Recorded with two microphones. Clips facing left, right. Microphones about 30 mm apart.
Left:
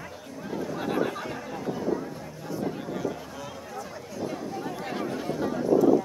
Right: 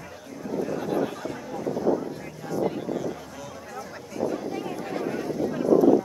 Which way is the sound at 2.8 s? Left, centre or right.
Centre.